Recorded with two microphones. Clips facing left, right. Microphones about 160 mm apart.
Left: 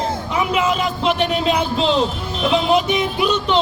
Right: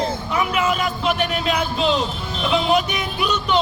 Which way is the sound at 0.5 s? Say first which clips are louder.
Left 2 dB; 25° left (ahead or behind).